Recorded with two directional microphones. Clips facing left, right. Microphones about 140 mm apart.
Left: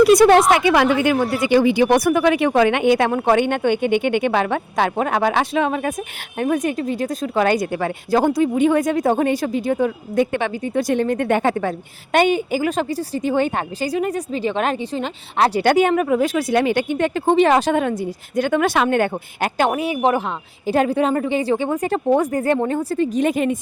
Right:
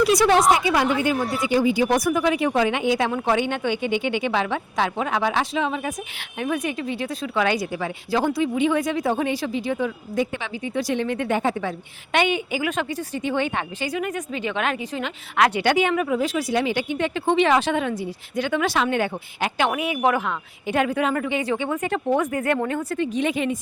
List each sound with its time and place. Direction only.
0.0 s speech: 55° left (ahead or behind)
0.5 s speech: 75° left (ahead or behind)
1.0 s speech: 70° left (ahead or behind)
6.4 s speech: 45° left (ahead or behind)
11.3 s speech: 60° left (ahead or behind)
12.1 s a woman's voice: 40° left (ahead or behind)
15.6 s speech: 45° left (ahead or behind)